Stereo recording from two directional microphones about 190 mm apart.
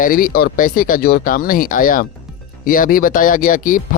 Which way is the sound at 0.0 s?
50° left (ahead or behind).